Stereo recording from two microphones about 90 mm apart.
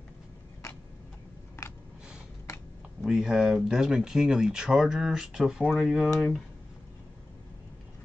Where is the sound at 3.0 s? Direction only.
5° right (ahead or behind).